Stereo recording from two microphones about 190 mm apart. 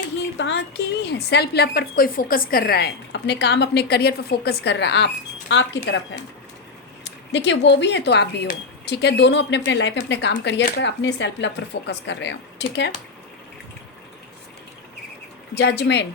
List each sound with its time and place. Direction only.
0.3 s a woman's voice: 70° left (ahead or behind)
7.0 s speech: 70° left (ahead or behind)
15.5 s a woman's voice: 65° left (ahead or behind)